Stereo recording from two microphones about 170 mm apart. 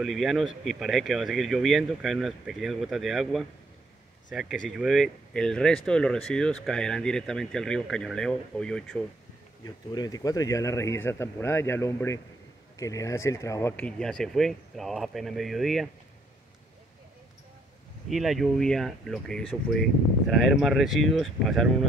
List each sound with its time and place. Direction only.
0.0 s speech: centre (ahead or behind)
9.7 s speech: 20° left (ahead or behind); by 15.9 s centre (ahead or behind)
18.1 s speech: centre (ahead or behind)